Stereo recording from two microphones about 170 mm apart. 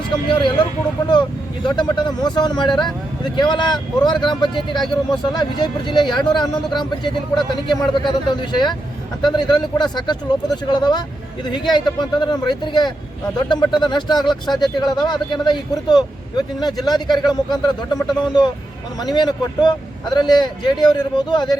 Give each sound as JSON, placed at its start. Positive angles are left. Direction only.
{"t": 0.3, "sound": "speech", "side_deg": 30}